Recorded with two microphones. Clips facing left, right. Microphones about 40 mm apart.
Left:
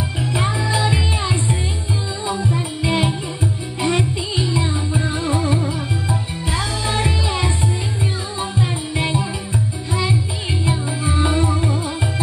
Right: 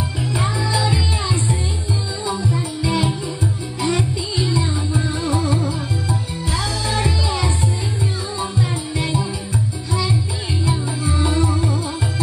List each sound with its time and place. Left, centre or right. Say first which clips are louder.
0.2 s music: left 1 dB; left
10.6 s music: even; left